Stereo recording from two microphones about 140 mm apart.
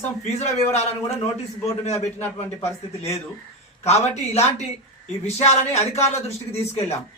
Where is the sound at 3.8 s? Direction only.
50° left (ahead or behind).